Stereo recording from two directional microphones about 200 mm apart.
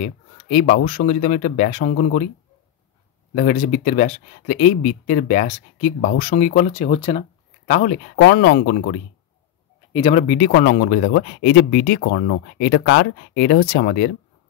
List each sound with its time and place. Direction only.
0.8 s speech: 40° left (ahead or behind)
3.3 s speech: 40° left (ahead or behind)
8.2 s speech: 55° left (ahead or behind)
10.1 s speech: 40° left (ahead or behind)